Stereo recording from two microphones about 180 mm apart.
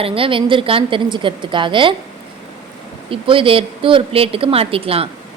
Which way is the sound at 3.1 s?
30° right (ahead or behind).